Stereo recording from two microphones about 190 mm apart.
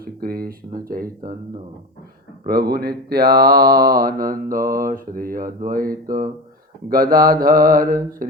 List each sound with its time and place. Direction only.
0.0 s mantra: 50° right (ahead or behind)
2.5 s mantra: 55° right (ahead or behind)